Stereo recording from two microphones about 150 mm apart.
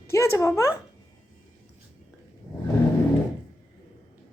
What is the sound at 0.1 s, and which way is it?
Speech, 20° left (ahead or behind).